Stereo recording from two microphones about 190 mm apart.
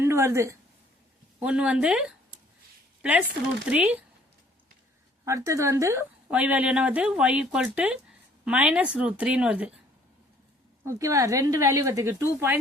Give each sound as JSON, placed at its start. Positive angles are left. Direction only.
{"t": 0.0, "sound": "a woman's voice", "side_deg": -15}
{"t": 5.2, "sound": "a woman's voice", "side_deg": -15}
{"t": 10.8, "sound": "a woman's voice", "side_deg": -15}